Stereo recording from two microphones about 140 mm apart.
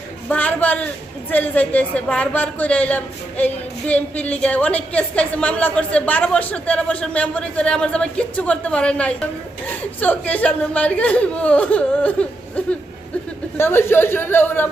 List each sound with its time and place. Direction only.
0.3 s speech: 10° left (ahead or behind)